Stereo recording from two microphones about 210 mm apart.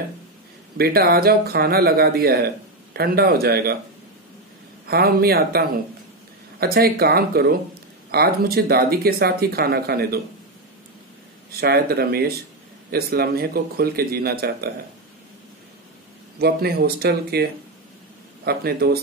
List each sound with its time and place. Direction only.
0.7 s speech: 45° right (ahead or behind)
4.8 s speech: 45° right (ahead or behind)
11.6 s speech: 45° right (ahead or behind)
16.3 s speech: 45° right (ahead or behind)